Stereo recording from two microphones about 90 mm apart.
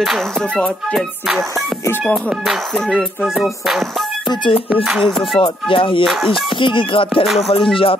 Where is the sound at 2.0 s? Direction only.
Centre (ahead or behind).